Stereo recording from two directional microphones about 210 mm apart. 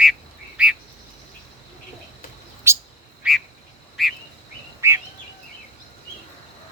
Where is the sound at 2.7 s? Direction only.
10° right (ahead or behind).